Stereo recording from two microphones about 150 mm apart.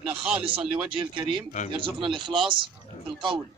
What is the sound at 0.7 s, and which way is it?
Speech, 35° right (ahead or behind).